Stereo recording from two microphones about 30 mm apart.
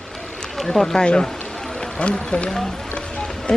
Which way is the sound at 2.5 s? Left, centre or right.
Centre.